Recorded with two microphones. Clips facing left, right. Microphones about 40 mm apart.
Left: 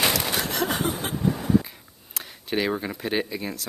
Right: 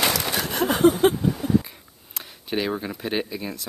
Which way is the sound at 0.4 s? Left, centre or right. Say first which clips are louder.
Right 1 dB; right.